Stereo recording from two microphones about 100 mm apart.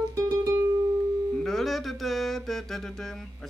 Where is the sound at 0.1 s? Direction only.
30° right (ahead or behind).